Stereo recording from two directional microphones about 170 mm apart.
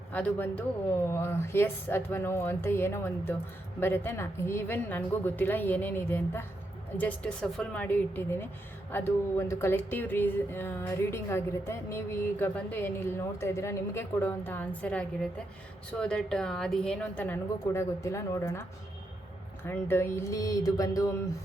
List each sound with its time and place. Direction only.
0.1 s a woman's voice: 10° left (ahead or behind)
19.6 s speech: 15° left (ahead or behind)